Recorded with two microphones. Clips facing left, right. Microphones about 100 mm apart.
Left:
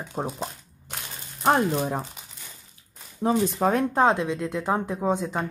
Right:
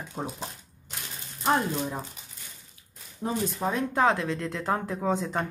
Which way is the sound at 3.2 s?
90° left.